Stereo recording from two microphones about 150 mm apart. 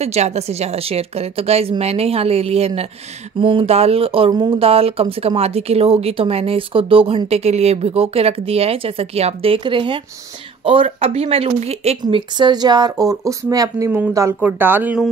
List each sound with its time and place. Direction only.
0.0 s a woman's voice: 45° right (ahead or behind)
12.0 s speech: 30° right (ahead or behind); by 15.0 s 10° right (ahead or behind)